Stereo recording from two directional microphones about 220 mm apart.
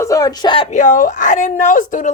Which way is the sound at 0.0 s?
15° left (ahead or behind).